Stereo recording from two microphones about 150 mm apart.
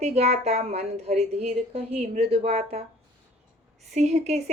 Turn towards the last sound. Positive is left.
turn(degrees=-45)  # may be behind; listen again after turning